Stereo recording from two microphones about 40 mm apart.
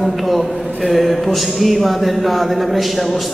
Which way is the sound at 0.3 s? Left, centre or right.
Centre.